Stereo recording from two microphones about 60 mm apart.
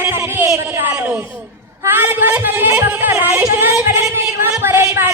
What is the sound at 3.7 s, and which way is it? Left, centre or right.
A woman's voice, right.